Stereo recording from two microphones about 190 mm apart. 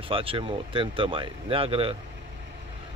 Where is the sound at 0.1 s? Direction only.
30° right (ahead or behind).